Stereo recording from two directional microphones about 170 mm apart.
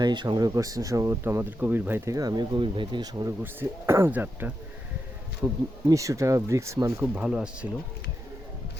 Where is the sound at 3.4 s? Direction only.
10° right (ahead or behind).